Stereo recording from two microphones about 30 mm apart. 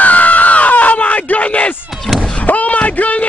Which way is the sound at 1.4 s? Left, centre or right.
Left.